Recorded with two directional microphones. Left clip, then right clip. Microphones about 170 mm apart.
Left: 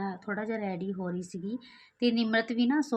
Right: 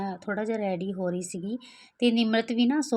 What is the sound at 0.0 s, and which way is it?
Speech, 40° right (ahead or behind).